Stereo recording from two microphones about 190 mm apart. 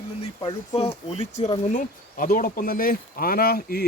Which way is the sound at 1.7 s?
45° left (ahead or behind).